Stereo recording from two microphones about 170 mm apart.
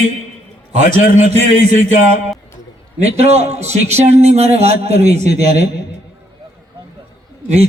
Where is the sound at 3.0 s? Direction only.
40° right (ahead or behind).